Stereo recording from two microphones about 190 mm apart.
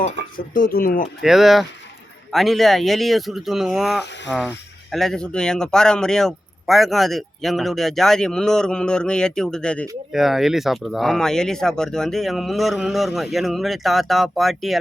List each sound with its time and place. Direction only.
0.5 s speech: 50° left (ahead or behind)
1.2 s speech: centre (ahead or behind)